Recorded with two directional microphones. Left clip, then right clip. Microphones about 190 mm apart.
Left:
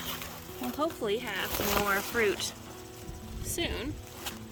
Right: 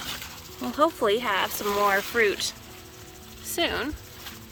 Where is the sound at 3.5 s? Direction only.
5° left (ahead or behind).